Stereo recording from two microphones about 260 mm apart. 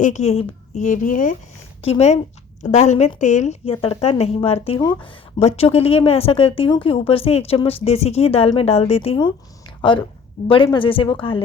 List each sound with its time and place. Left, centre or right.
0.0 s a woman's voice: left
10.5 s a woman's voice: centre